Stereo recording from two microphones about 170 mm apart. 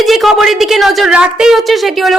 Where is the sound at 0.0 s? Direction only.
Centre (ahead or behind).